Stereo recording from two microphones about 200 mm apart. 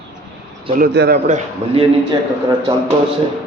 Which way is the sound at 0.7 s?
50° right (ahead or behind).